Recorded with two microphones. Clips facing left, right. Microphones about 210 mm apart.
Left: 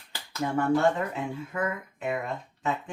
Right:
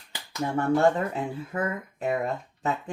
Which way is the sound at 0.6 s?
35° right (ahead or behind).